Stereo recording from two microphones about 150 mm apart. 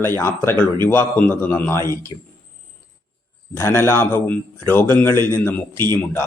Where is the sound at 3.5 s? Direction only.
15° left (ahead or behind).